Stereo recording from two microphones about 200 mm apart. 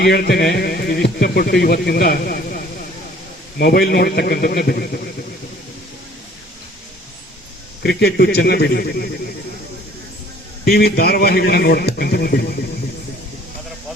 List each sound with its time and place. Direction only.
0.0 s speech: 55° left (ahead or behind)
3.6 s speech: 50° left (ahead or behind)
7.8 s speech: 55° left (ahead or behind)
10.7 s speech: 50° left (ahead or behind)